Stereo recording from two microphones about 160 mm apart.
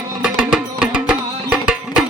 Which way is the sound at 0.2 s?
5° right (ahead or behind).